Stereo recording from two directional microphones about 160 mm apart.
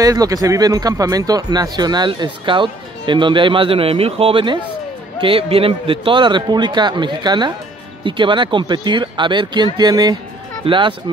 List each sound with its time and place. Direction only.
0.0 s speech: 20° right (ahead or behind)